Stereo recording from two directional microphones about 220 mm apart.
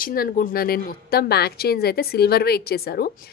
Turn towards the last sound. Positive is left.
turn(degrees=45)  # may be behind; listen again after turning